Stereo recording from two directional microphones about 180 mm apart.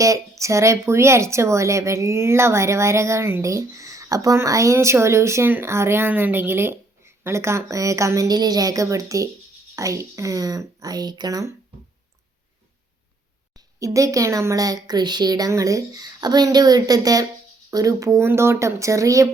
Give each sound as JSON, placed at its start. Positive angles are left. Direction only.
{"t": 0.0, "sound": "a woman's voice", "side_deg": -15}
{"t": 13.7, "sound": "a woman's voice", "side_deg": -20}